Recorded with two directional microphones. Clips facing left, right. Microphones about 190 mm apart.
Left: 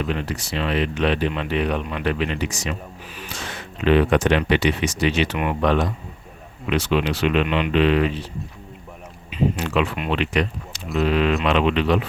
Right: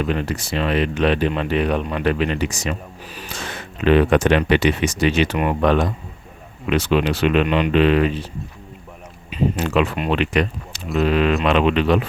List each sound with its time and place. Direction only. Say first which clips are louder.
0.0 s speech: right 3 dB; 45° right (ahead or behind)
9.3 s speech: right 2 dB; 45° right (ahead or behind)